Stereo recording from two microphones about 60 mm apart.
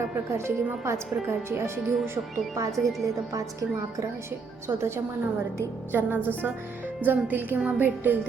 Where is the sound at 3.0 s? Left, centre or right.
Right.